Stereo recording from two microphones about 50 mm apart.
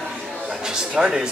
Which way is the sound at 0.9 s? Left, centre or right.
Centre.